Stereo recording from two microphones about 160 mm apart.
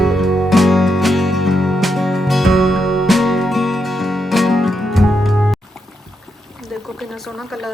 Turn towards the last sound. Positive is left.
turn(degrees=0)  # may be behind; listen again after turning